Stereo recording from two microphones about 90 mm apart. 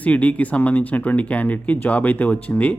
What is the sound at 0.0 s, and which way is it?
A man's voice, 15° left (ahead or behind).